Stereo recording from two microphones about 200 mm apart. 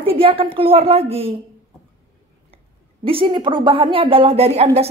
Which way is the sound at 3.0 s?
25° right (ahead or behind).